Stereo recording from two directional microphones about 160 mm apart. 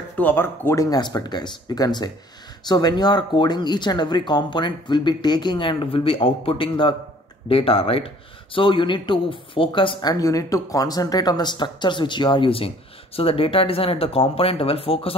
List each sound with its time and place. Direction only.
0.2 s speech: 15° left (ahead or behind); by 15.1 s 35° left (ahead or behind)